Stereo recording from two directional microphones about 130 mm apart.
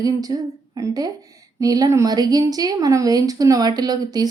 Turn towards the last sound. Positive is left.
turn(degrees=-30)  # may be behind; listen again after turning